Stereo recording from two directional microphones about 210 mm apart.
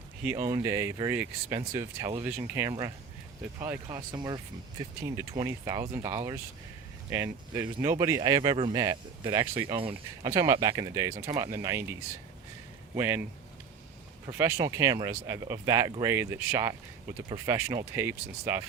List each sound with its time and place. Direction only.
0.2 s speech: 10° right (ahead or behind)
5.4 s speech: 15° right (ahead or behind)
13.0 s speech: 10° right (ahead or behind)
14.3 s speech: 10° right (ahead or behind)